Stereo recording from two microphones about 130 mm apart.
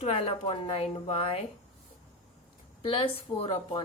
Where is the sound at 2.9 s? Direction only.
45° left (ahead or behind).